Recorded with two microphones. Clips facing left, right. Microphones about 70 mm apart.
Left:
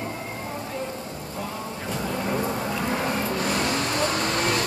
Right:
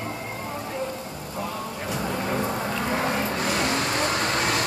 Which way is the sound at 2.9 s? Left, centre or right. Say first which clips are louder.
Right 2 dB; right.